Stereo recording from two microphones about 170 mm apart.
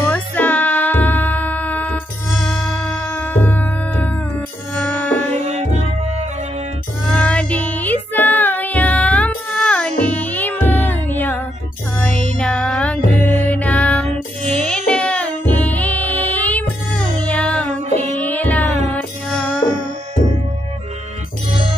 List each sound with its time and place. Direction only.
0.1 s music: 10° left (ahead or behind)
5.3 s music: 40° right (ahead or behind)
7.2 s music: 5° left (ahead or behind)